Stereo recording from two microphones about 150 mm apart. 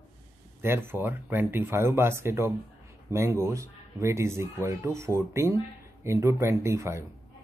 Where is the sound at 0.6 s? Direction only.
15° right (ahead or behind).